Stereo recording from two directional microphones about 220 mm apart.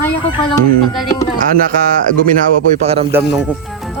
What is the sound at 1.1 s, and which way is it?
Speech, 15° left (ahead or behind).